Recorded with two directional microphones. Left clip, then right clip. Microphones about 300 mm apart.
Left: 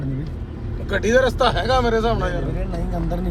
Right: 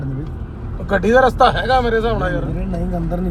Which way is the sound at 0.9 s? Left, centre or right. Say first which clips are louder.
Right 4 dB; centre.